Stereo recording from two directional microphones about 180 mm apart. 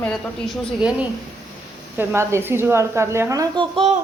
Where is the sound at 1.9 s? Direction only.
15° right (ahead or behind); by 3.9 s 30° right (ahead or behind).